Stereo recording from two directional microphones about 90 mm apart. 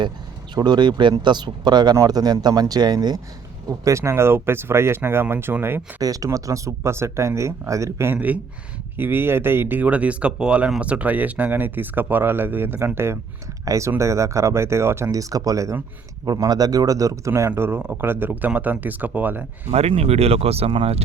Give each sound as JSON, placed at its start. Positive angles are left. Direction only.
{"t": 0.5, "sound": "speech", "side_deg": -50}
{"t": 3.7, "sound": "speech", "side_deg": -35}
{"t": 6.0, "sound": "speech", "side_deg": -40}
{"t": 15.1, "sound": "speech", "side_deg": -40}
{"t": 20.4, "sound": "speech", "side_deg": -90}